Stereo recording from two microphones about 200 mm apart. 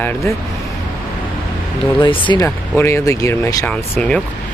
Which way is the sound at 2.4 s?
10° left (ahead or behind).